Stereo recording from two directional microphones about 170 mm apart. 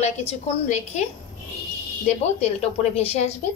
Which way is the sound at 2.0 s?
40° left (ahead or behind).